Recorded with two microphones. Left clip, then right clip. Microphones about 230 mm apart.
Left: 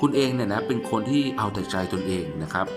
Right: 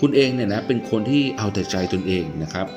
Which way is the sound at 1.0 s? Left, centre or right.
Left.